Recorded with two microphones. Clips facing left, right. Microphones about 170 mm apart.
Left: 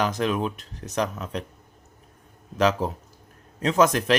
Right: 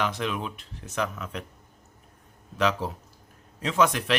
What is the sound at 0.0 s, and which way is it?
Speech, 40° left (ahead or behind).